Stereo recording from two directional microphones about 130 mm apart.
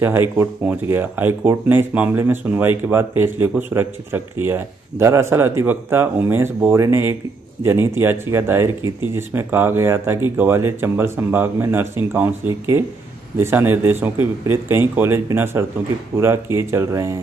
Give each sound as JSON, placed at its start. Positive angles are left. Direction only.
{"t": 0.0, "sound": "speech", "side_deg": -15}
{"t": 13.4, "sound": "speech", "side_deg": -20}